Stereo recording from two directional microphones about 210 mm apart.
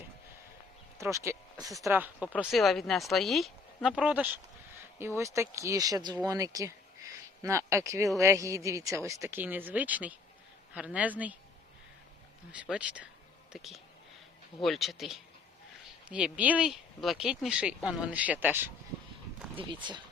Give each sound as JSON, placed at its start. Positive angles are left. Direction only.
{"t": 0.9, "sound": "speech", "side_deg": -15}
{"t": 2.4, "sound": "speech", "side_deg": 0}
{"t": 12.5, "sound": "speech", "side_deg": -5}
{"t": 19.5, "sound": "speech", "side_deg": -20}